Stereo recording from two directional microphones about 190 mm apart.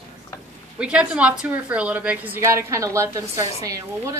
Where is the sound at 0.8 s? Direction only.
5° right (ahead or behind).